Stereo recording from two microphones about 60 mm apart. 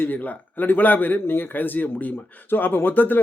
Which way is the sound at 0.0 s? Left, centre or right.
Left.